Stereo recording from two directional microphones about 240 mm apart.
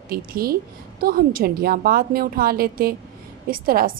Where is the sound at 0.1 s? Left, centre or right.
Right.